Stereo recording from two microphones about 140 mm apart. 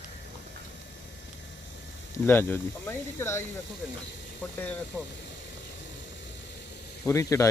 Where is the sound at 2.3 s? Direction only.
15° left (ahead or behind).